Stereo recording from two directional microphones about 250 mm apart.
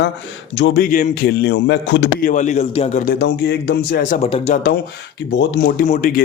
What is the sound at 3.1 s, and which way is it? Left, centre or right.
A man's voice, left.